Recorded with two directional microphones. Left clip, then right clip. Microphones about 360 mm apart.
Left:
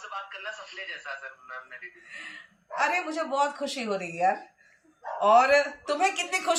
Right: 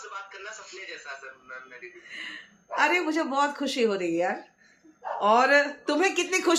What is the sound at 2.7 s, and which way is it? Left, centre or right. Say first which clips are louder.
Speech: right 3 dB; centre.